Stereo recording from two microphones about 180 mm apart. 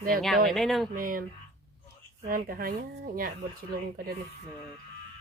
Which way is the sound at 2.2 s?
55° right (ahead or behind).